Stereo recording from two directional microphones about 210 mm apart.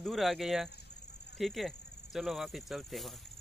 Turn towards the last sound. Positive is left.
turn(degrees=0)  # may be behind; listen again after turning